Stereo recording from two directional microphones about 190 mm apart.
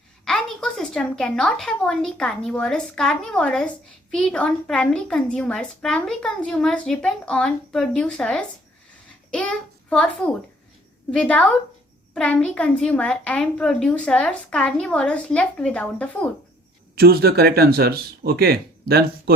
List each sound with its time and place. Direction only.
0.3 s a woman's voice: 5° left (ahead or behind)
16.9 s speech: 55° right (ahead or behind)